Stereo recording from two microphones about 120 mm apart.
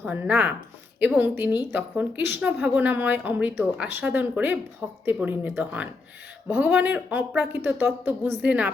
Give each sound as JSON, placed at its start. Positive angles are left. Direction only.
{"t": 0.0, "sound": "a woman's voice", "side_deg": -15}